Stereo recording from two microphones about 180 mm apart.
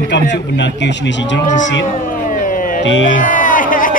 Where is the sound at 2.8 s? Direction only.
90° left.